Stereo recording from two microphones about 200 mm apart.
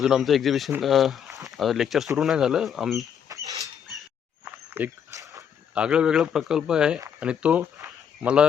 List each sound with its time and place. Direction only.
0.0 s a man's voice: centre (ahead or behind)
3.3 s rodents: 15° right (ahead or behind)
4.7 s walk: 10° right (ahead or behind)
5.7 s a man's voice: 5° right (ahead or behind)